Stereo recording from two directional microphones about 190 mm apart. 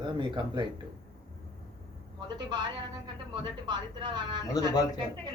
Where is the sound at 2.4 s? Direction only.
25° right (ahead or behind).